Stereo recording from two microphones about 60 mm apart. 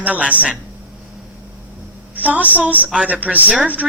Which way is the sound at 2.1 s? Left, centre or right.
Right.